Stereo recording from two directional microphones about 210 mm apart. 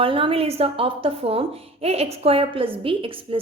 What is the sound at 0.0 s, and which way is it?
A woman's voice, 25° right (ahead or behind).